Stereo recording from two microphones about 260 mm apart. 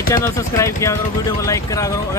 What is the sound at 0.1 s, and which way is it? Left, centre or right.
Speech, centre.